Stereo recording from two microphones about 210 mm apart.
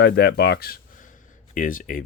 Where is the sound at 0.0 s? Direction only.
50° left (ahead or behind).